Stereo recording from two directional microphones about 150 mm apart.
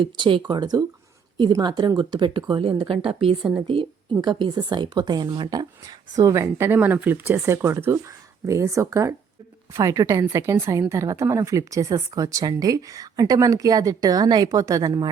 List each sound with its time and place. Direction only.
0.0 s a woman's voice: 35° right (ahead or behind)